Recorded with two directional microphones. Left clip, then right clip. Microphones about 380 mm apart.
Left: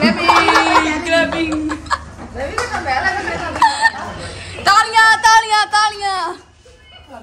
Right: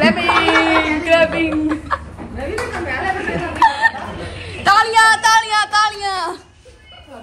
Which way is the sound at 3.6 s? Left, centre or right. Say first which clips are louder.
Even; centre.